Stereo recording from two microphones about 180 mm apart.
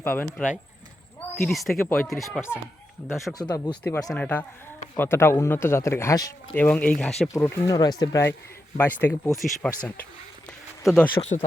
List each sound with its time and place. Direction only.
0.0 s speech: 10° left (ahead or behind)
3.8 s speech: 10° left (ahead or behind)
11.1 s speech: 35° left (ahead or behind)